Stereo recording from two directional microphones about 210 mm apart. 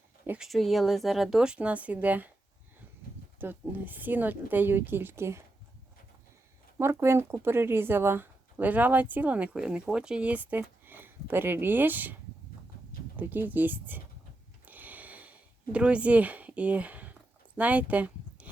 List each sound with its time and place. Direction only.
0.3 s speech: centre (ahead or behind)
3.3 s speech: 10° right (ahead or behind)
6.7 s speech: 10° right (ahead or behind)
13.1 s speech: 10° right (ahead or behind)
14.6 s a sound: 10° right (ahead or behind)
17.6 s speech: 5° right (ahead or behind)